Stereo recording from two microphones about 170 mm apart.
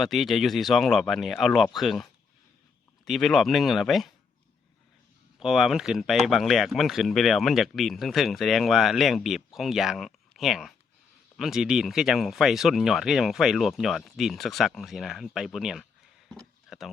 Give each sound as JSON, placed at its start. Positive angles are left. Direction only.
{"t": 0.0, "sound": "speech", "side_deg": 0}
{"t": 5.4, "sound": "speech", "side_deg": -5}
{"t": 16.3, "sound": "a sound", "side_deg": 0}